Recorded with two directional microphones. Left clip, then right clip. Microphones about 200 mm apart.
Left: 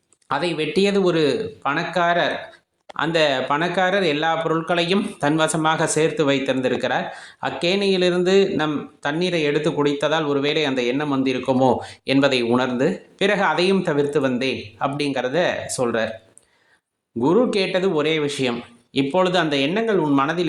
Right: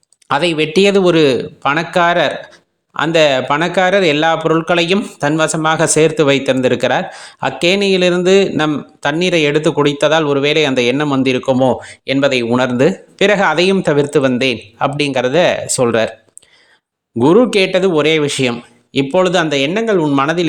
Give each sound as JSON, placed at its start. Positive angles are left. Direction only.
{"t": 0.3, "sound": "speech", "side_deg": -40}
{"t": 11.5, "sound": "speech", "side_deg": -25}
{"t": 17.2, "sound": "speech", "side_deg": -40}